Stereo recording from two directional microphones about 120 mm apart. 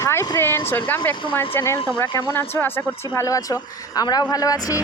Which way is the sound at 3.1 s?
30° left (ahead or behind).